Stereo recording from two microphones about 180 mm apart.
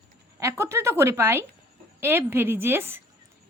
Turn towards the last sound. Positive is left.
turn(degrees=-10)  # may be behind; listen again after turning